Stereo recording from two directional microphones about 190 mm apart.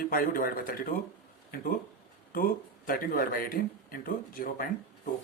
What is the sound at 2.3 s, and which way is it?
Speech, 50° left (ahead or behind).